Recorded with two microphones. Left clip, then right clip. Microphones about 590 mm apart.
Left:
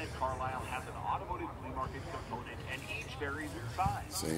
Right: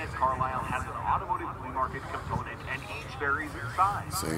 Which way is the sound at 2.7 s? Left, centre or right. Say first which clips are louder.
Right 5 dB; left.